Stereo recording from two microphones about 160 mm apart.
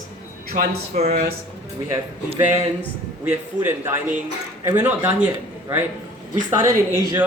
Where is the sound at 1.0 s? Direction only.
85° right.